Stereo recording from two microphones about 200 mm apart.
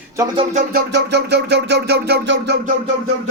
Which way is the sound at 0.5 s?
50° right (ahead or behind).